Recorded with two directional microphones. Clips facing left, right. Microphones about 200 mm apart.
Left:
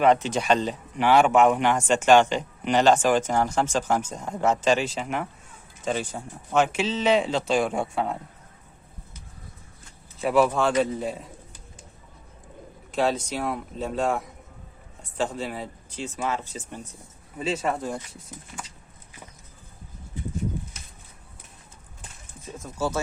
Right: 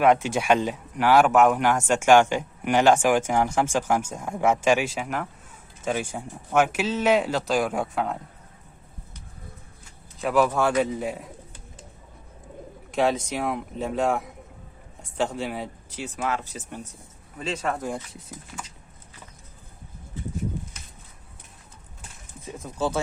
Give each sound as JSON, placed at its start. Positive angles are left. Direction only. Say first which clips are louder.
{"t": 0.0, "sound": "speech", "louder": "even", "side_deg": -10}
{"t": 10.2, "sound": "speech", "louder": "left 1 dB", "side_deg": 0}
{"t": 10.9, "sound": "speech", "louder": "even", "side_deg": -10}
{"t": 13.0, "sound": "speech", "louder": "right 1 dB", "side_deg": -15}
{"t": 16.1, "sound": "speech", "louder": "right 1 dB", "side_deg": 0}
{"t": 17.8, "sound": "speech", "louder": "right 1 dB", "side_deg": -15}